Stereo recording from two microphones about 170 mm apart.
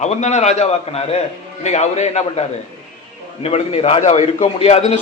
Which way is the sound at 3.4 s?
35° left (ahead or behind).